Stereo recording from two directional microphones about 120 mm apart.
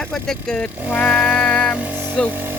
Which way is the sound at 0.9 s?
10° left (ahead or behind).